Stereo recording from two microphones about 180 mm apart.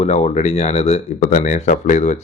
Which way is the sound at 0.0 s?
40° left (ahead or behind).